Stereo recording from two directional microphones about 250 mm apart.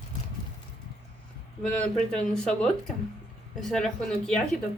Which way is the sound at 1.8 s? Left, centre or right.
Centre.